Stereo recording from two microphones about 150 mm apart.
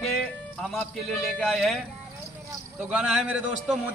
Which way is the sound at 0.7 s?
Centre (ahead or behind).